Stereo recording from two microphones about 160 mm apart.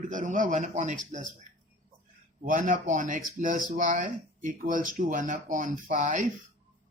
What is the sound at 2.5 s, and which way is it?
Speech, 55° right (ahead or behind).